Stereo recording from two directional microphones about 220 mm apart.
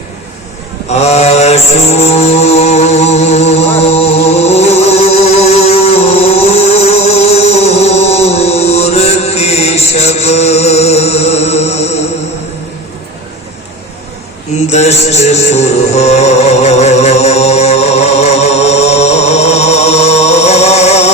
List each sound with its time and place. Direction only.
1.0 s mantra: 30° left (ahead or behind)
14.7 s music: 30° left (ahead or behind)